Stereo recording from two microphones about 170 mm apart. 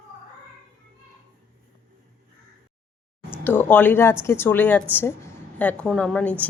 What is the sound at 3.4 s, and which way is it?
A woman's voice, 10° left (ahead or behind).